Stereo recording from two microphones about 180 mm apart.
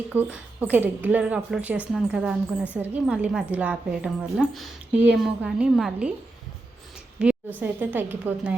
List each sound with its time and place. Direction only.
0.1 s a woman's voice: 10° right (ahead or behind)
7.2 s a woman's voice: 5° right (ahead or behind)